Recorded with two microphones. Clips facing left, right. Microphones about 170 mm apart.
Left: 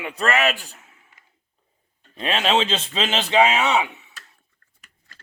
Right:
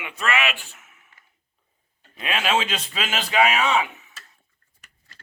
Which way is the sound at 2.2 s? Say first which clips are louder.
Left 3 dB; 30° left (ahead or behind).